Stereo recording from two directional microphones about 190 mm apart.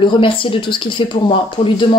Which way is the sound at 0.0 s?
25° left (ahead or behind).